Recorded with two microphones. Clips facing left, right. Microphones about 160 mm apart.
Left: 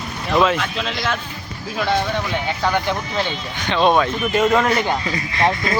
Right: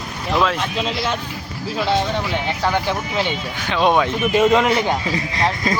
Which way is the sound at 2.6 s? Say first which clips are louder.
Even; 10° right (ahead or behind).